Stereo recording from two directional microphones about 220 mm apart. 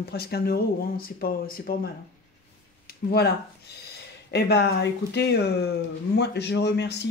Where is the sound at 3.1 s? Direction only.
45° left (ahead or behind).